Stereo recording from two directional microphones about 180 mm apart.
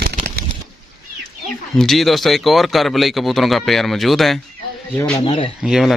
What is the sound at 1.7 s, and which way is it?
Speech, centre (ahead or behind).